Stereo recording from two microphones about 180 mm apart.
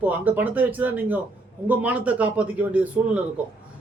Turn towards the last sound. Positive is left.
turn(degrees=-5)  # may be behind; listen again after turning